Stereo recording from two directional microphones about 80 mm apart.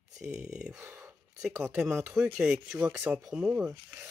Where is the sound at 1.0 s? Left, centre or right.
Centre.